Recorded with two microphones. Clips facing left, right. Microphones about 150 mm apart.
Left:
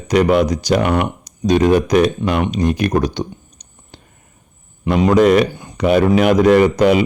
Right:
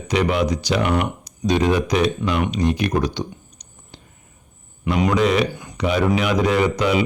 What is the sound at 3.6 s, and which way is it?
Clicking, 30° left (ahead or behind).